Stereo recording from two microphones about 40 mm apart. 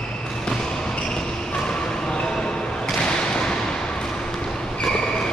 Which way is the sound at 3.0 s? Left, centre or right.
Left.